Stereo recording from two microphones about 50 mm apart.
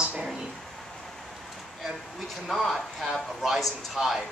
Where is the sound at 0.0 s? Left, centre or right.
Right.